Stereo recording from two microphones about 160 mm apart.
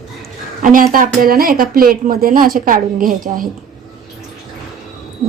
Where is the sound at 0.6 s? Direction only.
55° right (ahead or behind).